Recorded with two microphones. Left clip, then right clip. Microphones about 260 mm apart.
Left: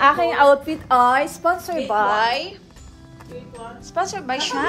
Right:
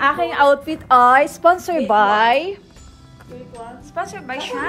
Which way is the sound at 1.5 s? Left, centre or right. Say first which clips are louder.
Right 5 dB; right.